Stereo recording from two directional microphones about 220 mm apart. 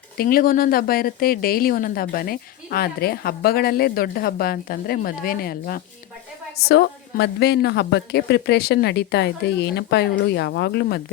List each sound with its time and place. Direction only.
0.2 s a woman's voice: 40° left (ahead or behind)